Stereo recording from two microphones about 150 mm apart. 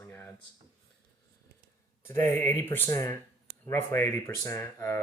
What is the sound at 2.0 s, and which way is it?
Speech, 15° left (ahead or behind).